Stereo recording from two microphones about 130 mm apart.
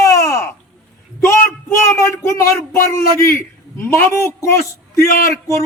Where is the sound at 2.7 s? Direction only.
90° left.